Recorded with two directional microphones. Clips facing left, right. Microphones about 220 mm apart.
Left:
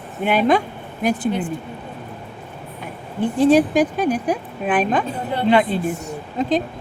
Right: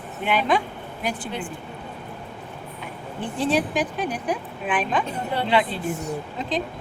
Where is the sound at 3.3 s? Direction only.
45° left (ahead or behind).